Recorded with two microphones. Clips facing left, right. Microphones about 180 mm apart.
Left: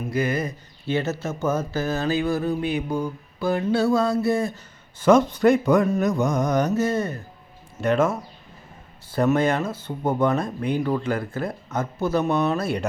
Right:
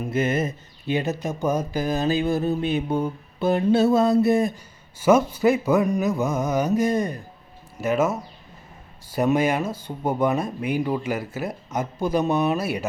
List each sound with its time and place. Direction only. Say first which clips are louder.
0.1 s speech: right 1 dB; 25° right (ahead or behind)
4.9 s speech: left 1 dB; 10° right (ahead or behind)
6.0 s music: left 1 dB; 5° right (ahead or behind)
7.8 s speech: left 1 dB; 5° right (ahead or behind)